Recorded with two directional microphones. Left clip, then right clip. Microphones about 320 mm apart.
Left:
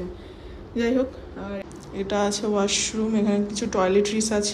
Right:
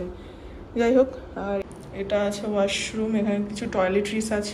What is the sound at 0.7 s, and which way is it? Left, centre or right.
A woman's voice, centre.